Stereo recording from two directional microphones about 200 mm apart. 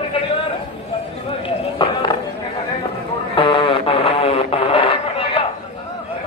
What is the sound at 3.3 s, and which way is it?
Radio, 30° left (ahead or behind).